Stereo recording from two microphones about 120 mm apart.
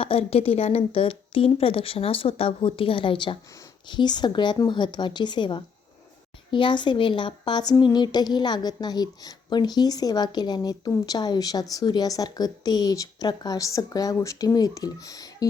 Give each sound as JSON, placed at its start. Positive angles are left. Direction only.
{"t": 0.0, "sound": "a woman's voice", "side_deg": 55}